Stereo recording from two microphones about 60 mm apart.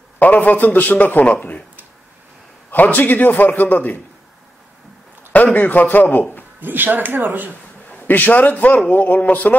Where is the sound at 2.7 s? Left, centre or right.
Left.